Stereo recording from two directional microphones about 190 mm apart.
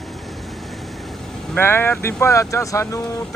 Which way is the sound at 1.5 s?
10° left (ahead or behind).